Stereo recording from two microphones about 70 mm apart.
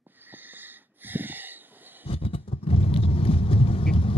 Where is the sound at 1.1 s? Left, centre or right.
Right.